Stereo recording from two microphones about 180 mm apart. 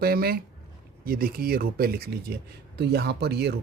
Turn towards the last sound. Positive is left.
turn(degrees=-65)  # may be behind; listen again after turning